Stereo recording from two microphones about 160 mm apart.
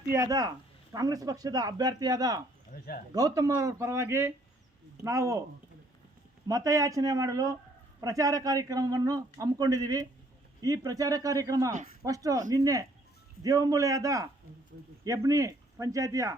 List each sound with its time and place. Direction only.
0.1 s speech: 20° right (ahead or behind)
2.7 s speech: 65° left (ahead or behind)
3.1 s speech: 25° right (ahead or behind)
6.5 s speech: 20° right (ahead or behind)